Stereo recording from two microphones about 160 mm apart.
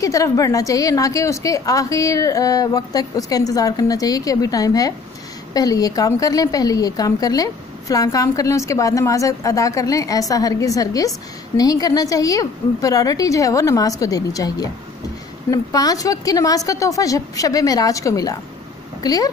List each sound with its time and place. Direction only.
0.0 s a woman's voice: 20° left (ahead or behind)